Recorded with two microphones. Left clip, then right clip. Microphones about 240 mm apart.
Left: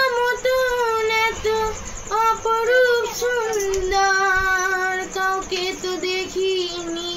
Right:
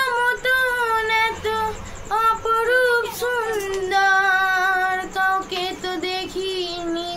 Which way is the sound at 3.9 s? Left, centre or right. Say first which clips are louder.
Right 2 dB; centre.